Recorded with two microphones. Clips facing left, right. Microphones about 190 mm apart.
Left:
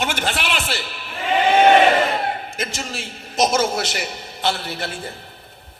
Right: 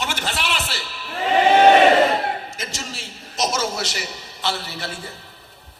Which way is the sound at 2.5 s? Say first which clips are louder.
Left 5 dB; 55° left (ahead or behind).